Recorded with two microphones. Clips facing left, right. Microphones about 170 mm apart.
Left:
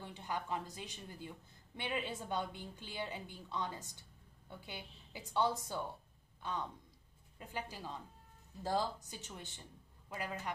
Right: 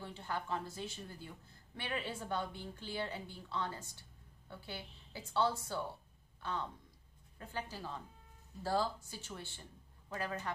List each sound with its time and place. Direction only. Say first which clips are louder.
0.0 s a woman's voice: even; 15° left (ahead or behind)